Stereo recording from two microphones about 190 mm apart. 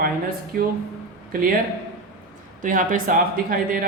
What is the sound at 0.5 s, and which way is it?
Speech, 50° right (ahead or behind).